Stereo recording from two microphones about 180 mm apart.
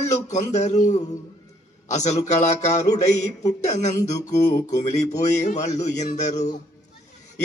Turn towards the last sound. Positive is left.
turn(degrees=40)  # may be behind; listen again after turning